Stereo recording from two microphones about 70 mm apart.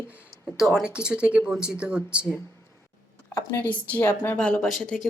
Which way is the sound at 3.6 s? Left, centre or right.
Left.